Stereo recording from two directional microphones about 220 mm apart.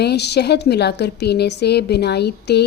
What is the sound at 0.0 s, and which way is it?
A woman's voice, 50° left (ahead or behind).